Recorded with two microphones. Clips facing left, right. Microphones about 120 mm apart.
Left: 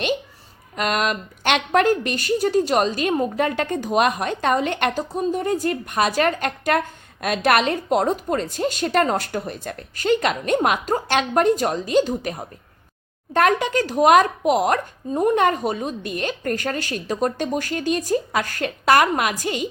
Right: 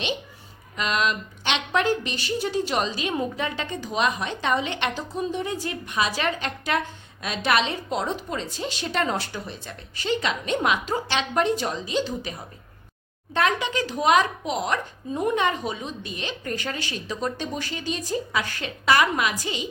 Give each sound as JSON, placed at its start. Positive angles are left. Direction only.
{"t": 0.8, "sound": "a woman's voice", "side_deg": 50}